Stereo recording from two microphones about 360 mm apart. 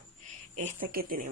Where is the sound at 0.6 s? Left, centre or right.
Right.